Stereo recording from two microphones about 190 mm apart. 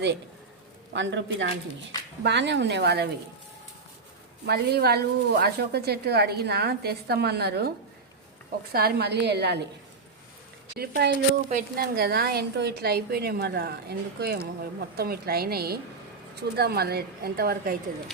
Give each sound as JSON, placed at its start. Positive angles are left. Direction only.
{"t": 0.9, "sound": "a man's voice", "side_deg": -75}
{"t": 4.4, "sound": "a woman's voice", "side_deg": -55}
{"t": 8.7, "sound": "a woman's voice", "side_deg": -55}
{"t": 10.8, "sound": "a woman's voice", "side_deg": -60}